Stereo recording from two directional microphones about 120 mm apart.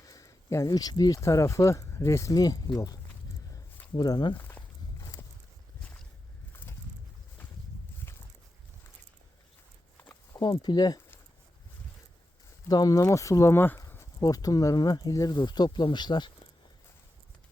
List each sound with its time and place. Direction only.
0.0 s speech: 30° left (ahead or behind)
4.4 s walk: 20° left (ahead or behind)
6.5 s a sound: 20° left (ahead or behind)
10.3 s speech: 35° left (ahead or behind)
12.6 s speech: 30° left (ahead or behind)